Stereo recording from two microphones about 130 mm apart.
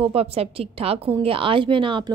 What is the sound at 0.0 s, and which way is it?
A woman's voice, 50° right (ahead or behind).